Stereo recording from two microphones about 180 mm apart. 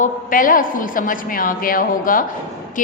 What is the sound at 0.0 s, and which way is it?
A man's voice, 50° left (ahead or behind).